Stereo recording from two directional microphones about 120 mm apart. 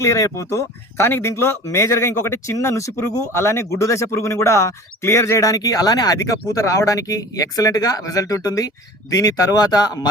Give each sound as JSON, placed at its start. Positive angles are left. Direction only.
{"t": 0.0, "sound": "speech", "side_deg": 25}